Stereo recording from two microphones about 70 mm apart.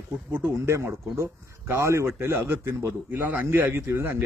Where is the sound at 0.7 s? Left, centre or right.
Right.